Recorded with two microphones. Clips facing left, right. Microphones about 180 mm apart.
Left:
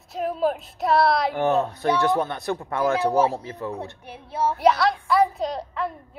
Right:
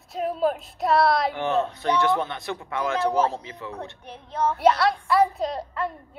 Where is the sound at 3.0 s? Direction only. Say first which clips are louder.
Left 2 dB; 10° left (ahead or behind).